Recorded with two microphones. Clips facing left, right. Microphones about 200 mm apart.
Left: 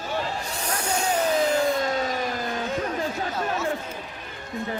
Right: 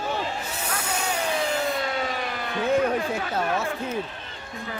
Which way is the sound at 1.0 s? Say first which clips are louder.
Left 5 dB; 40° left (ahead or behind).